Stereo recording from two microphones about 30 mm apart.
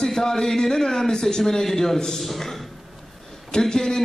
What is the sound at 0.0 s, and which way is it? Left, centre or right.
A man's voice, centre.